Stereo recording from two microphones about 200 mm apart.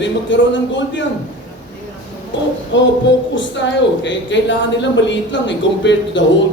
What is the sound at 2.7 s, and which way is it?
A woman's voice, 65° left (ahead or behind).